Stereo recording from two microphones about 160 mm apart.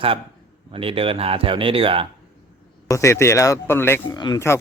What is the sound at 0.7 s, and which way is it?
Speech, 35° right (ahead or behind).